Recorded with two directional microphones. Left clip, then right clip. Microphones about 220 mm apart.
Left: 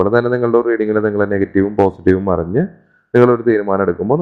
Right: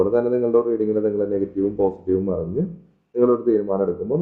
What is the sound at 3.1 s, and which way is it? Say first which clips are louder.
Speech: left 6 dB; 40° left (ahead or behind).